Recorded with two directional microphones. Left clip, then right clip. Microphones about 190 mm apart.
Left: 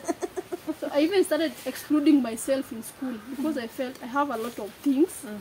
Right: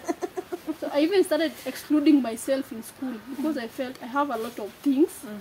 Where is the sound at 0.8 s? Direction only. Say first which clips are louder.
Right 1 dB; 10° right (ahead or behind).